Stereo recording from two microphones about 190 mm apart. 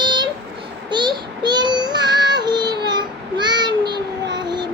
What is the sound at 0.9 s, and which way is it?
Child singing, 25° right (ahead or behind).